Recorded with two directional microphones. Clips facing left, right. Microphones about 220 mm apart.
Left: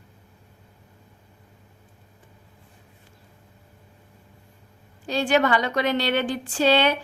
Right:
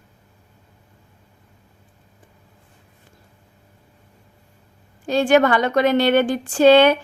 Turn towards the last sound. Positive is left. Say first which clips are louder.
# right 8 dB
turn(degrees=-50)  # may be behind; listen again after turning